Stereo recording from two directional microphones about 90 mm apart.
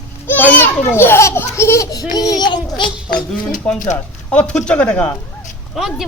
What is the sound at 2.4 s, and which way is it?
Speech, 60° left (ahead or behind).